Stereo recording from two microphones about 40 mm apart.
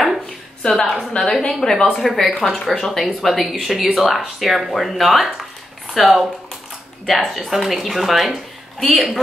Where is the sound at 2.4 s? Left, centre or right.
Centre.